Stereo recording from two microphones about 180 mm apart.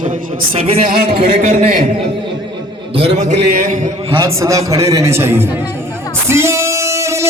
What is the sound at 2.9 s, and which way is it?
Speech, 35° right (ahead or behind).